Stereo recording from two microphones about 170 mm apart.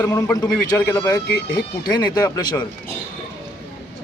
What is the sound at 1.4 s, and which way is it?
Speech, 75° left (ahead or behind).